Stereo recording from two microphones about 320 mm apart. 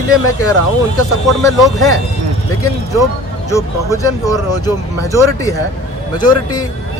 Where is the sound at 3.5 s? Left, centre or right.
Centre.